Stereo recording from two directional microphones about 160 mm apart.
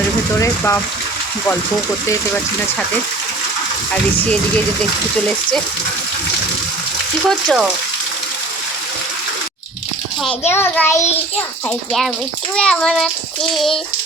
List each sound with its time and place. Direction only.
0.3 s speech: 20° left (ahead or behind)
3.9 s speech: 10° left (ahead or behind)
7.3 s a child's voice: centre (ahead or behind)
10.4 s speech: 15° left (ahead or behind)
12.5 s a child's voice: 5° left (ahead or behind)